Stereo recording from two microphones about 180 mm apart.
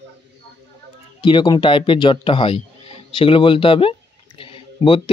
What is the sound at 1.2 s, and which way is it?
Speech, 25° left (ahead or behind).